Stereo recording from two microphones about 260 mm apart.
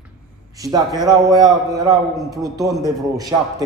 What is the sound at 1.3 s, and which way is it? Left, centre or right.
Speech, centre.